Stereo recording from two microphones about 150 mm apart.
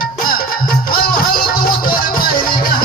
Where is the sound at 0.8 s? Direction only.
75° left (ahead or behind).